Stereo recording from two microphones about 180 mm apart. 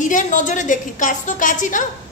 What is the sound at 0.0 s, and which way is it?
A woman's voice, 45° left (ahead or behind).